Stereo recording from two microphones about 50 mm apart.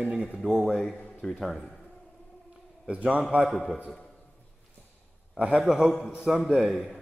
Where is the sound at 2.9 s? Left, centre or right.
Right.